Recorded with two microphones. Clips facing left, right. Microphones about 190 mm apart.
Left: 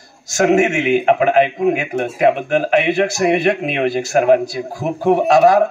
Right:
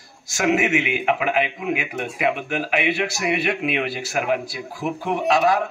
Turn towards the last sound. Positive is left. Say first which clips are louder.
# left 8 dB
turn(degrees=45)  # may be behind; listen again after turning